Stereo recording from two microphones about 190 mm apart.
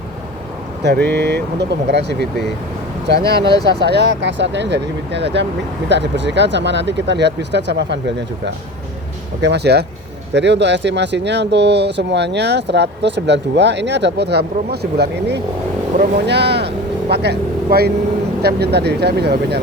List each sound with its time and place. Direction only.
0.8 s speech: 60° right (ahead or behind)
9.4 s speech: 60° right (ahead or behind)